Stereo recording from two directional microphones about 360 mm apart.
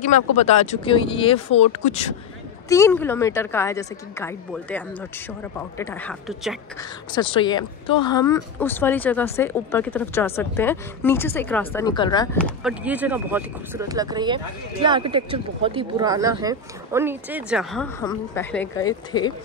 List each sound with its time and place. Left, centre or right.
0.0 s speech: centre
2.7 s speech: centre
6.8 s speech: centre